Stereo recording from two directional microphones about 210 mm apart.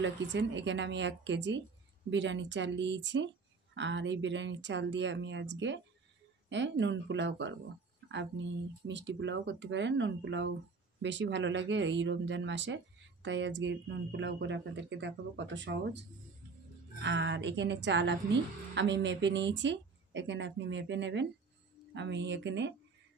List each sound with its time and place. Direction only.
0.0 s speech: 55° right (ahead or behind)
17.0 s speech: 60° right (ahead or behind)